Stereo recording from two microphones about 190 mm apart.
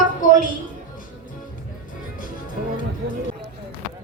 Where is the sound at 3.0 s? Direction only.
65° right (ahead or behind).